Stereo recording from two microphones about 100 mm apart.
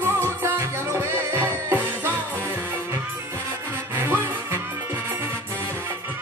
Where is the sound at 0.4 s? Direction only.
25° right (ahead or behind).